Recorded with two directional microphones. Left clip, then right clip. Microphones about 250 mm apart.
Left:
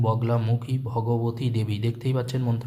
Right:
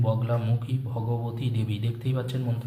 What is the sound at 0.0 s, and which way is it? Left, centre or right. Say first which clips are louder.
A man's voice: left 3 dB; left.